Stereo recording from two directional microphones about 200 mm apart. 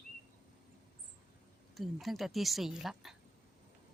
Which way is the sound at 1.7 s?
Centre (ahead or behind).